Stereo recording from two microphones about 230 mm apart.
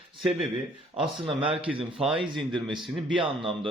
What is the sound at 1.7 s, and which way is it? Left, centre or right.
Speech, centre.